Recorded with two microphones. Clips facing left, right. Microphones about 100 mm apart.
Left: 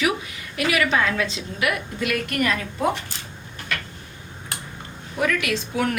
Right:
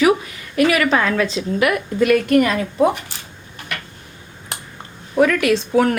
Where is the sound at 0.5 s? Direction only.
40° right (ahead or behind).